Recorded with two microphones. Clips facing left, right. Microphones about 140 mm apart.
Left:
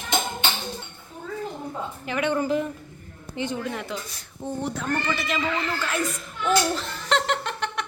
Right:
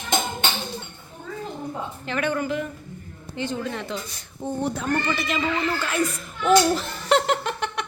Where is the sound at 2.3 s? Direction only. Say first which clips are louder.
Left 2 dB; 30° left (ahead or behind).